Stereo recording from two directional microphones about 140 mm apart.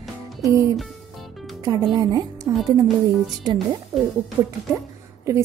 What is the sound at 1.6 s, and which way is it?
A woman's voice, 30° right (ahead or behind).